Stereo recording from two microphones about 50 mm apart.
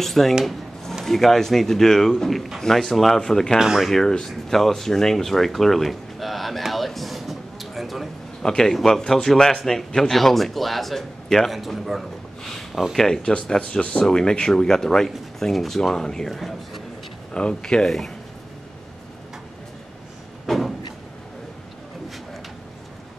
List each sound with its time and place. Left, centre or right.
0.0 s speech: centre
3.5 s speech: centre
4.3 s speech: centre
8.4 s a man's voice: centre
12.4 s a sound: centre
12.9 s speech: centre
13.3 s speech: centre
17.3 s speech: centre
20.4 s a sound: centre